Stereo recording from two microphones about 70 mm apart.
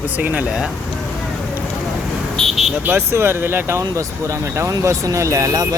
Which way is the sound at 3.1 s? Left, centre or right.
Right.